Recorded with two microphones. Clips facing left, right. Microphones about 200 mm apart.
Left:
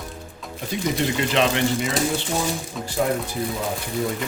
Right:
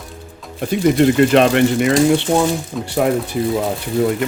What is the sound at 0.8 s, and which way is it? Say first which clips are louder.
Speech: right 11 dB; 55° right (ahead or behind).